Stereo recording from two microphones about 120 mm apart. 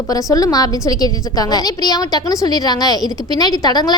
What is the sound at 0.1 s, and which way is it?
A woman's voice, 30° left (ahead or behind).